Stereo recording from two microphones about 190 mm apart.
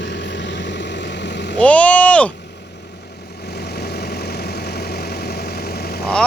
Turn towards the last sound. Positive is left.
turn(degrees=55)  # may be behind; listen again after turning